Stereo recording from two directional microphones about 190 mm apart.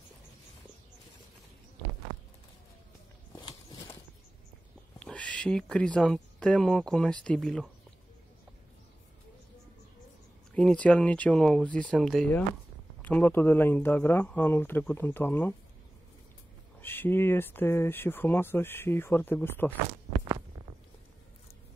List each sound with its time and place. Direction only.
3.4 s a sound: 20° left (ahead or behind)
4.9 s speech: 5° left (ahead or behind)
10.5 s speech: 5° left (ahead or behind)
16.8 s speech: 10° left (ahead or behind)